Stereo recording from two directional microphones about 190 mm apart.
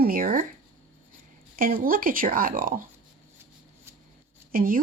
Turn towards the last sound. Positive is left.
turn(degrees=-50)  # may be behind; listen again after turning